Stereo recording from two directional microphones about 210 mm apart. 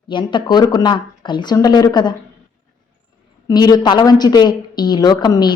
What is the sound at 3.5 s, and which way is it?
Speech, 20° left (ahead or behind).